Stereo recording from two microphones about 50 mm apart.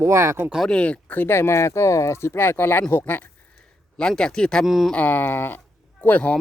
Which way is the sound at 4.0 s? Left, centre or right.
Centre.